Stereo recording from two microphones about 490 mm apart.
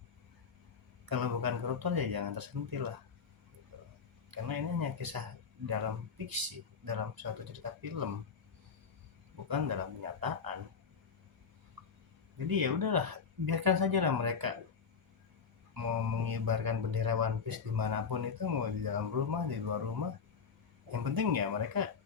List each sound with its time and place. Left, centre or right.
1.0 s speech: right
4.3 s speech: right
9.5 s speech: right
12.5 s speech: right
15.7 s speech: right